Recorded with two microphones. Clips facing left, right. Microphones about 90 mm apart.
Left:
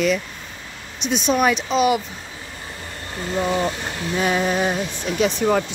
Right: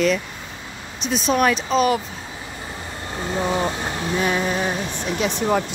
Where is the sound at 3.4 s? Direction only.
20° right (ahead or behind).